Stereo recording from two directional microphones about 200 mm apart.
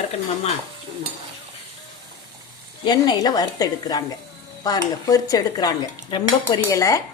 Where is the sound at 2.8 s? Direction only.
20° left (ahead or behind).